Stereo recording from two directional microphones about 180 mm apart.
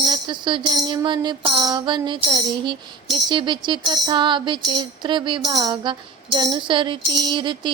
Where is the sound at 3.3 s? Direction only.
25° right (ahead or behind).